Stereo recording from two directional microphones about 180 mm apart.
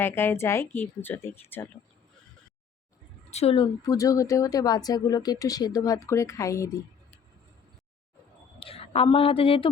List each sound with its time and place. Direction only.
0.0 s speech: 10° left (ahead or behind)
3.2 s a woman's voice: 35° left (ahead or behind)
3.6 s speech: 20° left (ahead or behind)
8.5 s a woman's voice: 30° left (ahead or behind)